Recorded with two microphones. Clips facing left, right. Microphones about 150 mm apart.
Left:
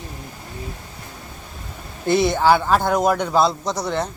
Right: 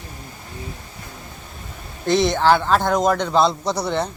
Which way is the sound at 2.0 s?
10° left (ahead or behind).